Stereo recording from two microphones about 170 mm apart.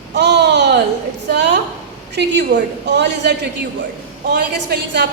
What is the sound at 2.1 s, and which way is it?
A woman's voice, 85° right.